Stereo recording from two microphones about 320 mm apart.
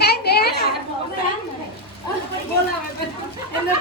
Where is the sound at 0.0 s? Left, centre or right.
Left.